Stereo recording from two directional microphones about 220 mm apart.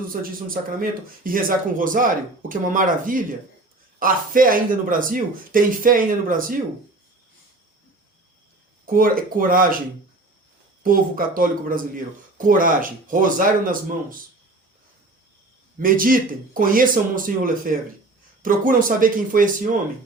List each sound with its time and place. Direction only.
0.1 s speech: 40° right (ahead or behind)
8.9 s speech: 40° right (ahead or behind)
10.8 s speech: 40° right (ahead or behind)
15.8 s speech: 40° right (ahead or behind)